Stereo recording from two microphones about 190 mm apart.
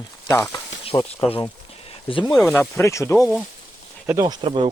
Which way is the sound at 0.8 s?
30° left (ahead or behind).